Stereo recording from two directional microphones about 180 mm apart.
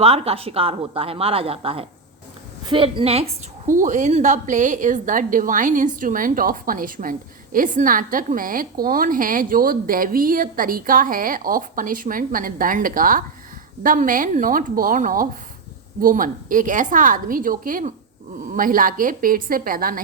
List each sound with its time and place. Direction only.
0.0 s a woman's voice: 35° right (ahead or behind)
3.7 s a woman's voice: 45° right (ahead or behind)